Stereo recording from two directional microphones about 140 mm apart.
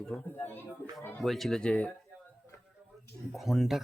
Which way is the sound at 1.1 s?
Centre (ahead or behind).